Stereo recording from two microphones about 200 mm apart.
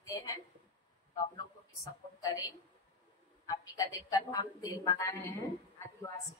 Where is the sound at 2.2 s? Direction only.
15° left (ahead or behind).